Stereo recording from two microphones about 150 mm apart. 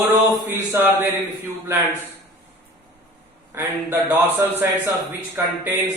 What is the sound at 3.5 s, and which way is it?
A man's voice, 15° right (ahead or behind).